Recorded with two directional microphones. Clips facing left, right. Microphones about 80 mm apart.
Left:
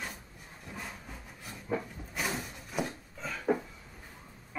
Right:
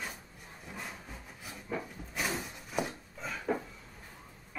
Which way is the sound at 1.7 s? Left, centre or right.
Left.